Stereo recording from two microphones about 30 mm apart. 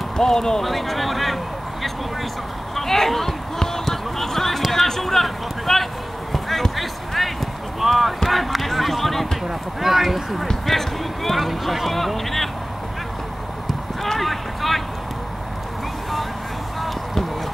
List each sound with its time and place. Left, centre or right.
0.2 s speech: centre
0.7 s a sound: centre
2.7 s basketball bounce: centre
4.7 s a sound: centre
7.8 s speech: centre
8.3 s basketball bounce: centre
9.5 s speech: centre
14.0 s clip-clop: centre